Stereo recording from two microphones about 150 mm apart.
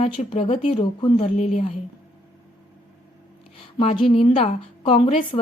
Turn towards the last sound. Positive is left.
turn(degrees=40)  # may be behind; listen again after turning